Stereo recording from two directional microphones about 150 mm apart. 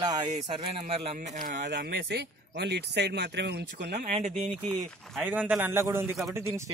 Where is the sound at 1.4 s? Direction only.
90° right.